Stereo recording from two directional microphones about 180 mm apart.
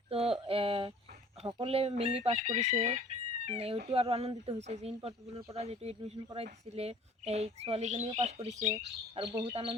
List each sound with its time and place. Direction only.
0.1 s a sound: 30° right (ahead or behind)
1.4 s speech: 30° right (ahead or behind)
9.1 s speech: 30° right (ahead or behind)